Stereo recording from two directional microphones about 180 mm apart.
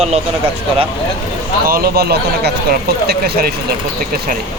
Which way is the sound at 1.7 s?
55° right (ahead or behind).